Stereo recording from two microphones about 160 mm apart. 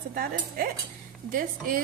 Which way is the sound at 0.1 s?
70° right (ahead or behind).